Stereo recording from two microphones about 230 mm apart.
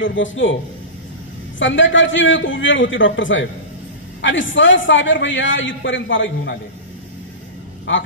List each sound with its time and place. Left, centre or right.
0.0 s a man's voice: left
1.6 s a man's voice: left
7.9 s a man's voice: left